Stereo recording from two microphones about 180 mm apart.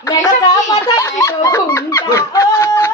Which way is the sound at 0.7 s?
15° left (ahead or behind).